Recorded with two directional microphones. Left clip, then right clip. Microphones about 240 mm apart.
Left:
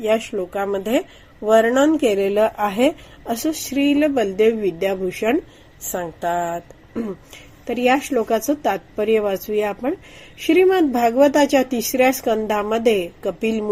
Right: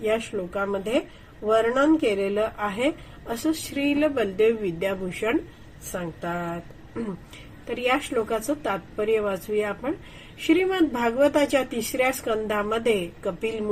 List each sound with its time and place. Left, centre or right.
0.5 s a woman's voice: left
7.7 s a woman's voice: left